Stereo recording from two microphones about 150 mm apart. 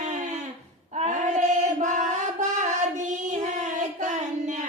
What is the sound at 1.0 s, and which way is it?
Music, 55° right (ahead or behind).